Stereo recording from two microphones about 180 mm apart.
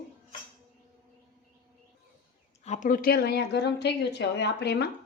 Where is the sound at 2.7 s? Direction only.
45° left (ahead or behind).